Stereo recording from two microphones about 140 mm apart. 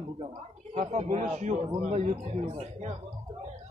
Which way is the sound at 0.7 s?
50° right (ahead or behind).